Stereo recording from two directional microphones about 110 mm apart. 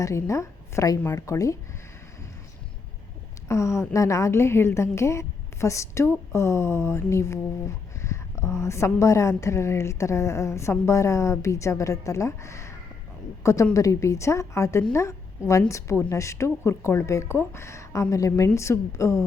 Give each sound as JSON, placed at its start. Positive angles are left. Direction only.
{"t": 0.0, "sound": "a woman's voice", "side_deg": 25}
{"t": 3.5, "sound": "a woman's voice", "side_deg": 25}